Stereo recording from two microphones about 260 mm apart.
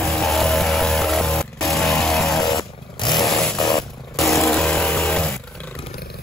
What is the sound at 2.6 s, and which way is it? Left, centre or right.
Motorcycle, centre.